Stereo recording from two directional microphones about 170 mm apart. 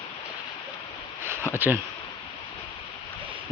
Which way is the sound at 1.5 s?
10° right (ahead or behind).